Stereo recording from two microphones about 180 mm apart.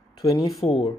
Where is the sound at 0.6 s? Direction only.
35° left (ahead or behind).